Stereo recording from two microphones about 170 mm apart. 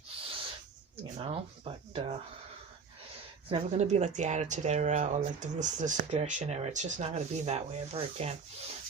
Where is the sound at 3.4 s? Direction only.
40° right (ahead or behind).